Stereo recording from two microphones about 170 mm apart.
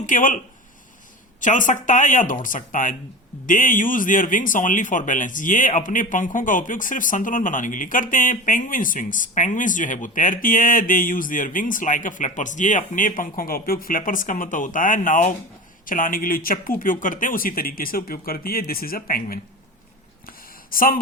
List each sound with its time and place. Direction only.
0.0 s speech: 50° left (ahead or behind)
1.4 s speech: 50° left (ahead or behind)
20.2 s a sound: 55° left (ahead or behind)